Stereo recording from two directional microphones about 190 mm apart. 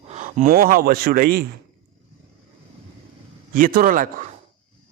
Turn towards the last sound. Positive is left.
turn(degrees=-45)  # may be behind; listen again after turning